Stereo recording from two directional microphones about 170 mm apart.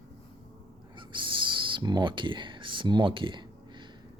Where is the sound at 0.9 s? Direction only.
30° right (ahead or behind).